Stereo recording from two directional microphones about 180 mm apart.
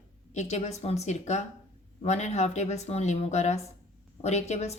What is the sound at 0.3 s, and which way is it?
A woman's voice, 40° left (ahead or behind).